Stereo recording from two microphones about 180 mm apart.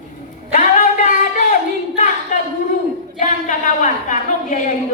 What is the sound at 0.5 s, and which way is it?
A woman's voice, 45° left (ahead or behind).